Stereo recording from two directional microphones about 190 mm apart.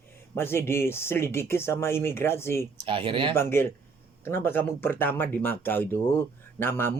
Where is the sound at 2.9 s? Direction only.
25° right (ahead or behind).